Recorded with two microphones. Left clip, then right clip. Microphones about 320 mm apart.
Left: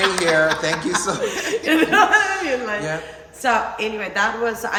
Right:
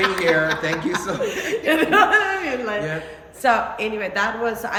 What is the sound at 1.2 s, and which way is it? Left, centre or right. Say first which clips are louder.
A woman's voice: left 1 dB; centre.